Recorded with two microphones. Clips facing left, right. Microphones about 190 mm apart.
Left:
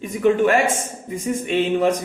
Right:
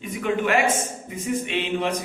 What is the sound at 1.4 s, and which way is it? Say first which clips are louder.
Speech: left 7 dB; 40° left (ahead or behind).